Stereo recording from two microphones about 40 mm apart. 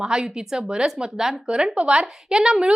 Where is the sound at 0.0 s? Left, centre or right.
Centre.